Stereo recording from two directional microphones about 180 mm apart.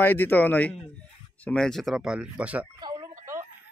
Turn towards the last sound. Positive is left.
turn(degrees=-15)  # may be behind; listen again after turning